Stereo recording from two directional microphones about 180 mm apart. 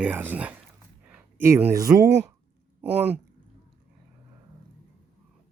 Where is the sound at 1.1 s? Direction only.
10° right (ahead or behind).